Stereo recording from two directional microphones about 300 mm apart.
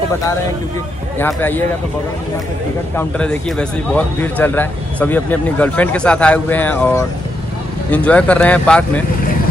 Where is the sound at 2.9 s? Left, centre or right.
Centre.